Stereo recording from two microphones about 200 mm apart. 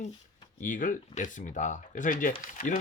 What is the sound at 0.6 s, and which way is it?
Speech, 40° left (ahead or behind).